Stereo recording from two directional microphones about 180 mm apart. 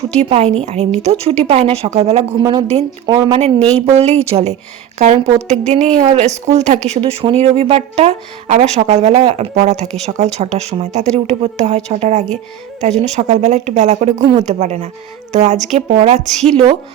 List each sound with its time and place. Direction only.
0.2 s speech: 35° right (ahead or behind)
2.4 s speech: 20° right (ahead or behind)
3.9 s speech: 35° right (ahead or behind)